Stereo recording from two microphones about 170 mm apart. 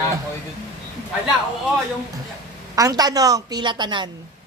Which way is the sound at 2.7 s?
20° right (ahead or behind).